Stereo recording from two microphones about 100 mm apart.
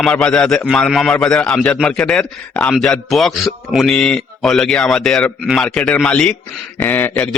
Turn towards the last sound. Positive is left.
turn(degrees=15)  # may be behind; listen again after turning